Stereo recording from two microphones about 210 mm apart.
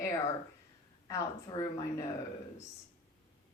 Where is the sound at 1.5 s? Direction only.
20° left (ahead or behind).